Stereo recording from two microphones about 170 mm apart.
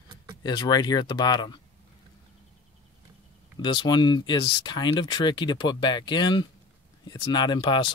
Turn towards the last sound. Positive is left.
turn(degrees=25)  # may be behind; listen again after turning